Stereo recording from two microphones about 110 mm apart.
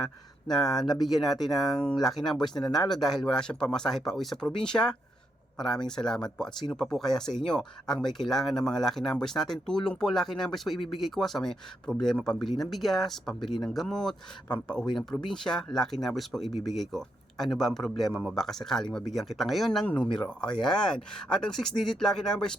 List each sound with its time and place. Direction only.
0.4 s speech: centre (ahead or behind)